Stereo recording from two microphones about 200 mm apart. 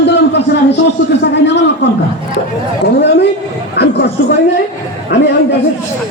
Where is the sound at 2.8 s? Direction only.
60° left (ahead or behind).